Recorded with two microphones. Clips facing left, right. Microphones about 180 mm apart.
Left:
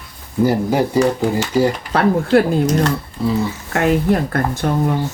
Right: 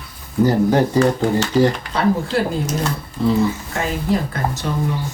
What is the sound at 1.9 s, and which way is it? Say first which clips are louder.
Speech: left 5 dB; 60° left (ahead or behind).